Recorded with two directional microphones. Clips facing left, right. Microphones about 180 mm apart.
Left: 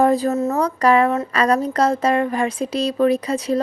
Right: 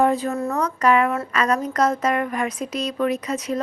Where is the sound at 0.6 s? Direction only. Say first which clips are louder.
Left 2 dB; 35° left (ahead or behind).